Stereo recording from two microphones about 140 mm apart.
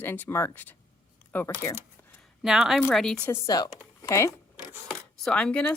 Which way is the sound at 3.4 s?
30° left (ahead or behind).